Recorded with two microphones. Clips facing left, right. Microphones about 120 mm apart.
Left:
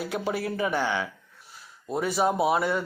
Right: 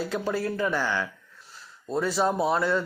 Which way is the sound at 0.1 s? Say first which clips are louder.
Right 1 dB; 15° left (ahead or behind).